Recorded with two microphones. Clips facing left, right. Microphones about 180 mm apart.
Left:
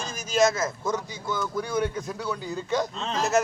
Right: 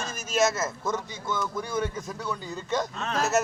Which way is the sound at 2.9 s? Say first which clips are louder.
Even; 20° left (ahead or behind).